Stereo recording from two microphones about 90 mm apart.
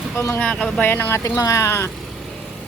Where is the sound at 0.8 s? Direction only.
20° left (ahead or behind).